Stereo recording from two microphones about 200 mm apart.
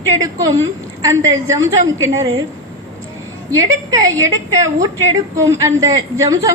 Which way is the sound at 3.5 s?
15° right (ahead or behind).